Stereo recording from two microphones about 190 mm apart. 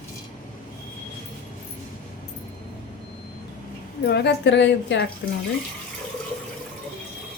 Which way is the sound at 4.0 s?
60° left (ahead or behind).